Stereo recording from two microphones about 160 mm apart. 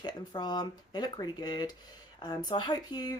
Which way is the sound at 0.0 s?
25° left (ahead or behind).